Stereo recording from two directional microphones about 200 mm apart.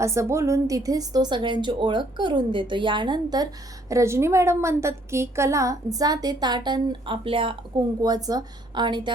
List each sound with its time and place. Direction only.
0.0 s a woman's voice: 15° right (ahead or behind)